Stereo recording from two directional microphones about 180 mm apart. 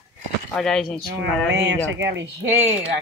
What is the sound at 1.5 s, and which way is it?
Speech, 85° right.